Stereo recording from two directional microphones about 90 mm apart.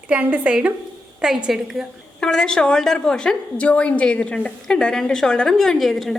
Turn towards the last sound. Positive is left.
turn(degrees=0)  # may be behind; listen again after turning